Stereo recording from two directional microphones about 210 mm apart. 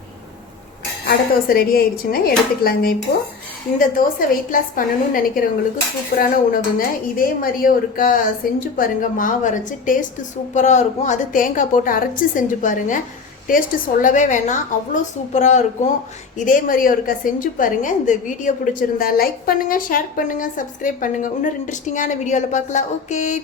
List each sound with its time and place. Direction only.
1.0 s a woman's voice: 45° left (ahead or behind)